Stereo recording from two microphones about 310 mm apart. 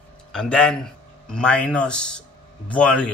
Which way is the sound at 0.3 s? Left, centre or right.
Centre.